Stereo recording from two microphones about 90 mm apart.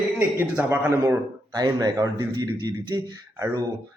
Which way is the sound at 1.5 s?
45° right (ahead or behind).